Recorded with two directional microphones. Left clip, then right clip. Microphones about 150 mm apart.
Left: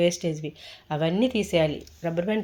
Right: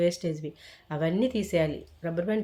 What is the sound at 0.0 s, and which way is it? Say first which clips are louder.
Speech: left 3 dB; 15° left (ahead or behind).